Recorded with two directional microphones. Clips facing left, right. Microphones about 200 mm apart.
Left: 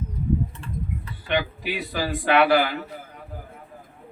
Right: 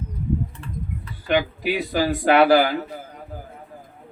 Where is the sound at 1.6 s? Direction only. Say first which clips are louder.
Right 6 dB; 40° right (ahead or behind).